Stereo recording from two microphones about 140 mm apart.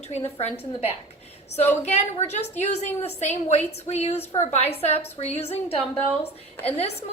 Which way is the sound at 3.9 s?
50° left (ahead or behind).